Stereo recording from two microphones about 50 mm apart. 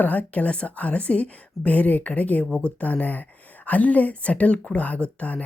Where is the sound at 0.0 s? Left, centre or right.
Left.